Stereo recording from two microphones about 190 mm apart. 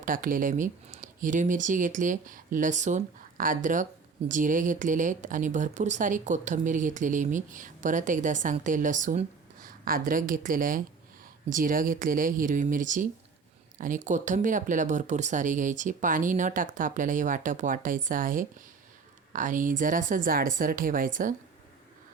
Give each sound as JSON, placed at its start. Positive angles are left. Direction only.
{"t": 0.0, "sound": "speech", "side_deg": -45}